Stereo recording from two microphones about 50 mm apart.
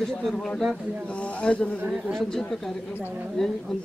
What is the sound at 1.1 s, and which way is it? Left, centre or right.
Speech, left.